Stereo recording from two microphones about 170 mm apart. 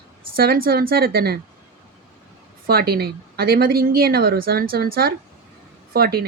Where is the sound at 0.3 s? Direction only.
60° right (ahead or behind).